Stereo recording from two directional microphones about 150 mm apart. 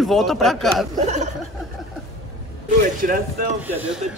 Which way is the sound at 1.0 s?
50° right (ahead or behind).